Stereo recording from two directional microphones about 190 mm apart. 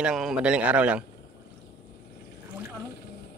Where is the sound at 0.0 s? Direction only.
5° right (ahead or behind).